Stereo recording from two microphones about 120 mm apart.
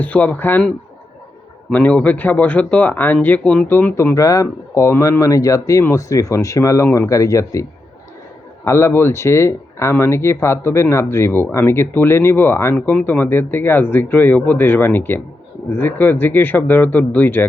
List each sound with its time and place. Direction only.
0.0 s speech: 15° left (ahead or behind)
1.7 s speech: 10° left (ahead or behind); by 7.6 s 25° left (ahead or behind)
8.6 s speech: 25° left (ahead or behind)